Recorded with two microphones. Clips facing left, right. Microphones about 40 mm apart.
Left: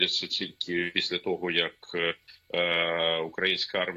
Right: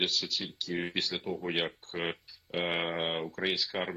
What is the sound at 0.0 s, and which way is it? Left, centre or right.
Speech, left.